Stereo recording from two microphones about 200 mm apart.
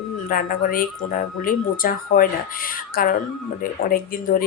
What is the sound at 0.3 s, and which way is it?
Speech, 45° left (ahead or behind).